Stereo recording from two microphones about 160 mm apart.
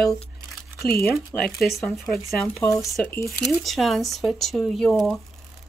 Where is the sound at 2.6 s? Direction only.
20° left (ahead or behind).